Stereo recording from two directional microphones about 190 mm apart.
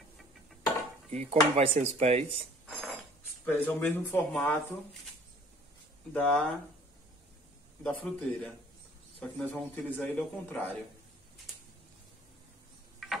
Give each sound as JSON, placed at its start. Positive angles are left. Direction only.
{"t": 1.1, "sound": "speech", "side_deg": -35}
{"t": 2.6, "sound": "mechanisms", "side_deg": 0}
{"t": 3.4, "sound": "speech", "side_deg": 10}
{"t": 6.1, "sound": "a man's voice", "side_deg": 0}
{"t": 7.8, "sound": "a man's voice", "side_deg": 5}
{"t": 9.5, "sound": "speech", "side_deg": 5}